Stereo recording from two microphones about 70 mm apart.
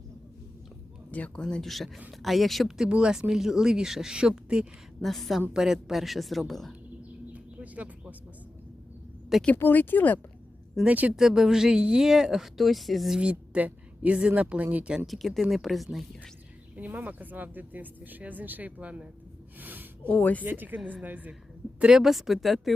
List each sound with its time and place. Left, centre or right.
1.1 s speech: centre
1.6 s speech: centre
4.9 s speech: centre
7.3 s bird: right
9.6 s speech: left
10.8 s speech: right
11.2 s speech: centre
13.1 s speech: centre
15.0 s speech: centre
16.7 s speech: right
19.5 s a sound: right
20.1 s speech: centre
20.4 s speech: right
21.8 s speech: centre